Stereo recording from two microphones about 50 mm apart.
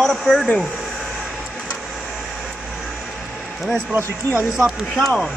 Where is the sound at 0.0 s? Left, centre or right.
Centre.